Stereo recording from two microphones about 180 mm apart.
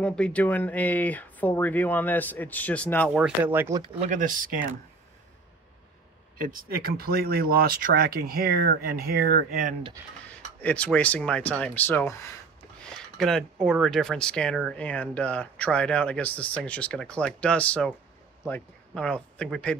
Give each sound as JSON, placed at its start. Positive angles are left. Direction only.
{"t": 0.0, "sound": "speech", "side_deg": 5}
{"t": 3.1, "sound": "speech", "side_deg": -10}
{"t": 3.8, "sound": "speech", "side_deg": -40}
{"t": 6.3, "sound": "speech", "side_deg": -50}
{"t": 10.6, "sound": "speech", "side_deg": 5}
{"t": 12.9, "sound": "speech", "side_deg": 0}